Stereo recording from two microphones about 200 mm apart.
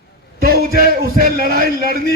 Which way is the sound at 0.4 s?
50° right (ahead or behind).